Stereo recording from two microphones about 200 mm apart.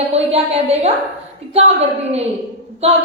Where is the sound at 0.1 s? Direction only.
30° right (ahead or behind).